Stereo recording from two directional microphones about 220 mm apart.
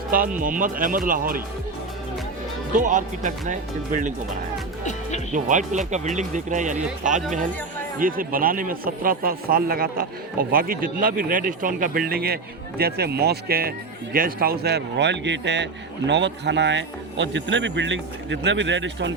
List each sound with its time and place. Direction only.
0.3 s speech: 40° right (ahead or behind)
2.7 s speech: 35° right (ahead or behind)
5.3 s speech: 35° right (ahead or behind)
7.9 s a man's voice: 40° right (ahead or behind); by 19.1 s 55° right (ahead or behind)